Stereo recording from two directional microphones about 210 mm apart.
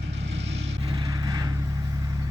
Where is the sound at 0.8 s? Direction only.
20° right (ahead or behind).